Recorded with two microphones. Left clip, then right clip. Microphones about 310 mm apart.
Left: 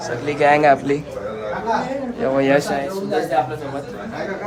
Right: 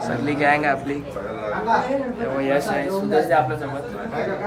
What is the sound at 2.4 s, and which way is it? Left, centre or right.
Speech, left.